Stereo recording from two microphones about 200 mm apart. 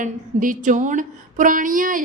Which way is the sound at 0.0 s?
40° right (ahead or behind).